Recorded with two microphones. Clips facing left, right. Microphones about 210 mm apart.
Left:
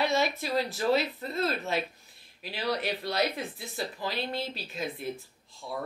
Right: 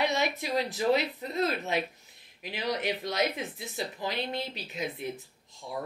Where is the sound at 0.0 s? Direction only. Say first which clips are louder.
Left 1 dB; 20° right (ahead or behind).